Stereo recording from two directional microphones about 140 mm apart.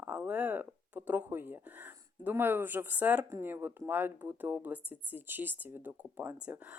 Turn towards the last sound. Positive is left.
turn(degrees=-15)  # may be behind; listen again after turning